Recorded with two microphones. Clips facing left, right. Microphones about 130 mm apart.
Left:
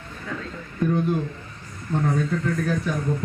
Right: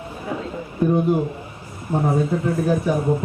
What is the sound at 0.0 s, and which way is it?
A man's voice, 20° right (ahead or behind).